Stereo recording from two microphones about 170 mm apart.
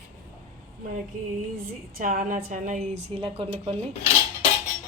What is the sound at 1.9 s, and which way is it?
A woman's voice, 55° right (ahead or behind).